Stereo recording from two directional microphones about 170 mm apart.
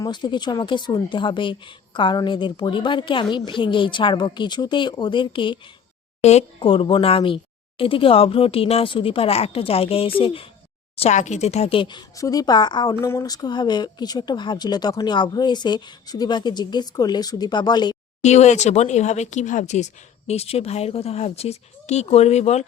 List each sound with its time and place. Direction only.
0.0 s speech: 25° left (ahead or behind)
18.2 s speech: 40° left (ahead or behind)